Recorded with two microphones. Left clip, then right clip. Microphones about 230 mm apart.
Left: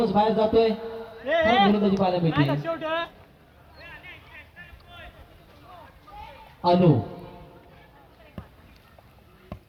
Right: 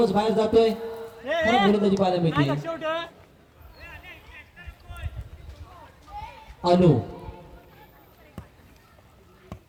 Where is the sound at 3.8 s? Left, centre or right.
Centre.